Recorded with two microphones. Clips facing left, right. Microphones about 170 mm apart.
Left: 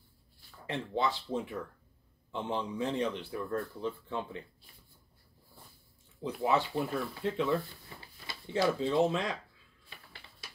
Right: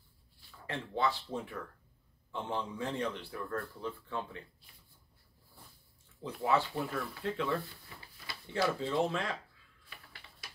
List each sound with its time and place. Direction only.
0.7 s a man's voice: 20° left (ahead or behind)
6.2 s a man's voice: 20° left (ahead or behind)